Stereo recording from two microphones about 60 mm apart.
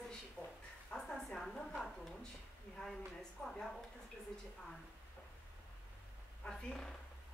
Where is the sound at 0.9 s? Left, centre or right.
Centre.